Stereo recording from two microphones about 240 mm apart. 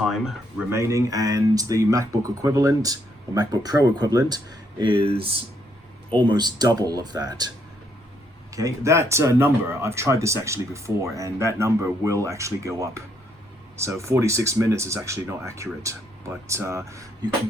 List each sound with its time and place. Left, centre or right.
0.0 s speech: centre
0.7 s speech: centre
8.5 s speech: centre